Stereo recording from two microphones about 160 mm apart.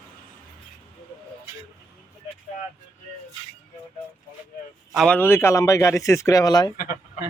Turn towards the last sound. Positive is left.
turn(degrees=65)  # may be behind; listen again after turning